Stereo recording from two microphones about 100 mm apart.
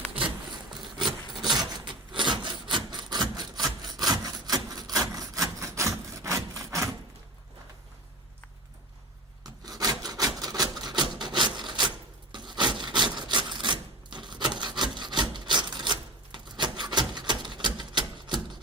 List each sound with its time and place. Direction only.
1.4 s rub: 45° right (ahead or behind); by 6.9 s 30° right (ahead or behind)
9.4 s rub: 40° right (ahead or behind)